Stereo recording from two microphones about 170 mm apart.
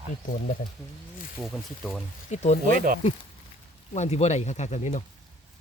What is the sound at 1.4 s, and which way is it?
Speech, centre (ahead or behind).